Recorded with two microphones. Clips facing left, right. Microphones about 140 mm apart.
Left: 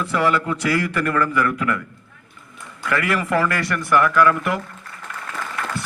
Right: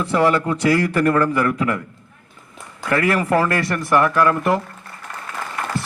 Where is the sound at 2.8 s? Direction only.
35° right (ahead or behind).